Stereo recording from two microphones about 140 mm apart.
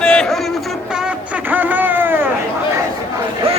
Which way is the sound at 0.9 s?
10° right (ahead or behind).